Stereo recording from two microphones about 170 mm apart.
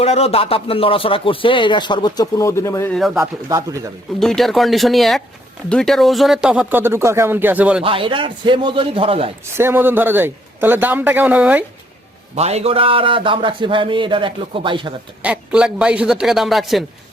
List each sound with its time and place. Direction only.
0.0 s speech: 35° left (ahead or behind); by 2.9 s 15° left (ahead or behind)
3.2 s speech: 20° right (ahead or behind)
4.2 s a man's voice: centre (ahead or behind)
7.9 s a man's voice: 30° right (ahead or behind)
9.6 s speech: 15° right (ahead or behind)
12.3 s a man's voice: 40° right (ahead or behind)
15.2 s a man's voice: 5° right (ahead or behind)